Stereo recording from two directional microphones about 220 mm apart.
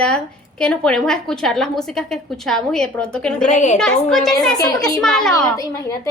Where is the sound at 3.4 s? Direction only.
35° left (ahead or behind).